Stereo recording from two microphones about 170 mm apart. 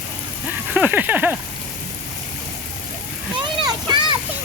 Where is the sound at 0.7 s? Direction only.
10° right (ahead or behind).